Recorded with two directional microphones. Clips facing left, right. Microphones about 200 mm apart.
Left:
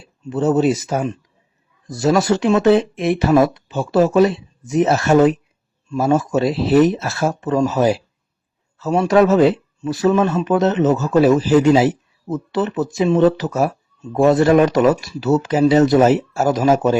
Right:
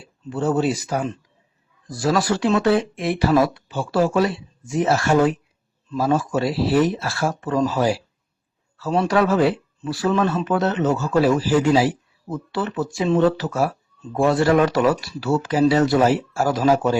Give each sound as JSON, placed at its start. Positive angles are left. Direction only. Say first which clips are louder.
{"t": 0.3, "sound": "speech", "louder": "left 5 dB", "side_deg": 20}